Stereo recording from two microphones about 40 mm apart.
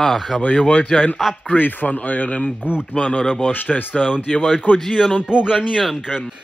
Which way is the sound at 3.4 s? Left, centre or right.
Left.